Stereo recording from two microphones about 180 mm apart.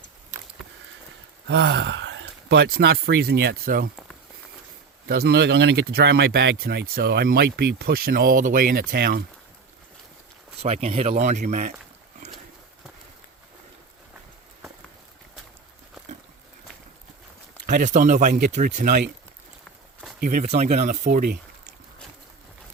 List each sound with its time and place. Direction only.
1.5 s speech: 70° right (ahead or behind); by 3.8 s 55° right (ahead or behind)
5.0 s speech: 60° right (ahead or behind)
10.6 s speech: 35° right (ahead or behind)
17.7 s speech: 45° right (ahead or behind)
20.2 s speech: 45° right (ahead or behind)